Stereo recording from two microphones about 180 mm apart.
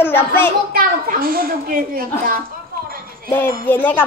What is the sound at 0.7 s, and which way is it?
A woman's voice, 55° right (ahead or behind).